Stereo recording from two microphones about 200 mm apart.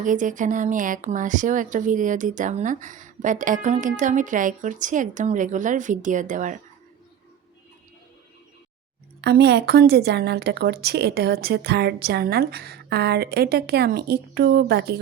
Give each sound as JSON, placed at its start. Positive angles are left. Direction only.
{"t": 0.0, "sound": "speech", "side_deg": -40}
{"t": 9.2, "sound": "speech", "side_deg": -55}